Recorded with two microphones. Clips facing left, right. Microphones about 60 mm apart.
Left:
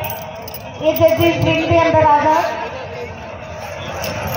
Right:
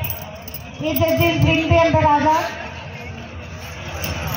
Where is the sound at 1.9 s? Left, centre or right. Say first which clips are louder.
Left 3 dB; left.